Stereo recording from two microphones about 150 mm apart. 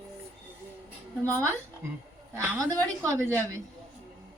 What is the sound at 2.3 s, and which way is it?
Speech, 15° right (ahead or behind).